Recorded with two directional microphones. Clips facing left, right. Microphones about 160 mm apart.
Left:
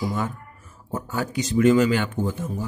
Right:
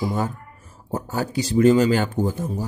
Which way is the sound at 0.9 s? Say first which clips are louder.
Right 2 dB; 35° right (ahead or behind).